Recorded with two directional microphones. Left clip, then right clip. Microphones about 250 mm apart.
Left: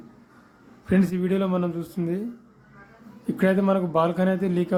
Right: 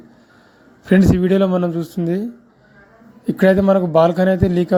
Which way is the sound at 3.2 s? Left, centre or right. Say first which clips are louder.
Right 9 dB; right.